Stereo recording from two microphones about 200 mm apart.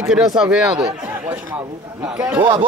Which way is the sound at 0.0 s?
Centre (ahead or behind).